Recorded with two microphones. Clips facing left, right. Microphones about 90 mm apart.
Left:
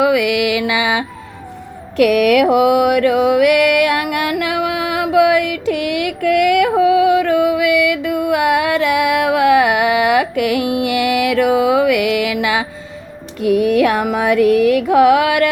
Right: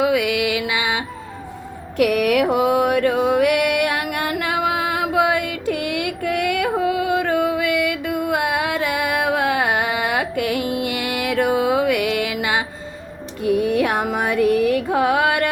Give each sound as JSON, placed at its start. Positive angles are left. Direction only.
{"t": 0.0, "sound": "music", "side_deg": 85}
{"t": 2.0, "sound": "mantra", "side_deg": 90}
{"t": 13.4, "sound": "music", "side_deg": 90}